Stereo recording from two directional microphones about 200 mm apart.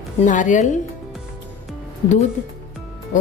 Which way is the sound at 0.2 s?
40° left (ahead or behind).